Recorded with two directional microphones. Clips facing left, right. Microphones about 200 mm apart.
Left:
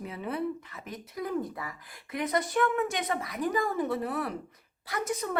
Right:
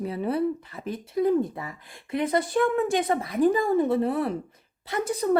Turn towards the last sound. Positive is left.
turn(degrees=-35)  # may be behind; listen again after turning